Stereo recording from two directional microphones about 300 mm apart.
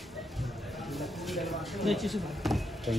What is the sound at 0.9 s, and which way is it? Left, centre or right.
Speech, centre.